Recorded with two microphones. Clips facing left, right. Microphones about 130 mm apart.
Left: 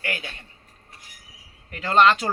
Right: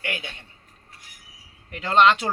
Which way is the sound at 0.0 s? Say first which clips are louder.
Left 1 dB; 20° right (ahead or behind).